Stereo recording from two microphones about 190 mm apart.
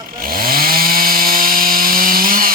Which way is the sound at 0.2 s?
50° right (ahead or behind).